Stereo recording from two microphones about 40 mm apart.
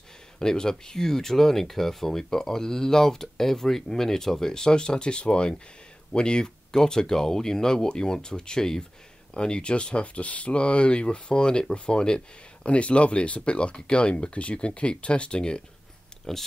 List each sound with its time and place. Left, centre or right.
0.4 s speech: centre
16.3 s speech: centre